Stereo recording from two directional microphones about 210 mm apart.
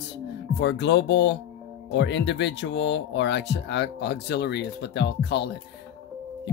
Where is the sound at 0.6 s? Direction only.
55° left (ahead or behind).